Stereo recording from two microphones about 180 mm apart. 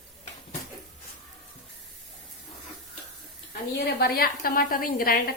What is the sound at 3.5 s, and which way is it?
A woman's voice, 60° left (ahead or behind).